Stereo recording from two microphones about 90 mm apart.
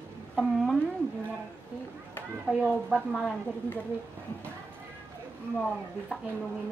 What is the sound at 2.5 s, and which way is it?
Speech, 10° right (ahead or behind).